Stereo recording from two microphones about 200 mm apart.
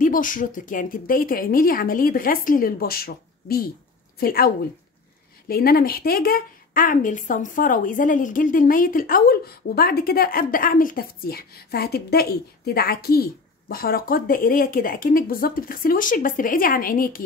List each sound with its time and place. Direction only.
0.0 s speech: 40° left (ahead or behind)
5.5 s speech: 50° left (ahead or behind)